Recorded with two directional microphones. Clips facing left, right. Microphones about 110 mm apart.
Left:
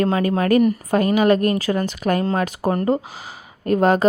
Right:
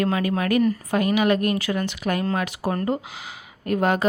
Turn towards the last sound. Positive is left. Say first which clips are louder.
# left 5 dB
turn(degrees=35)  # may be behind; listen again after turning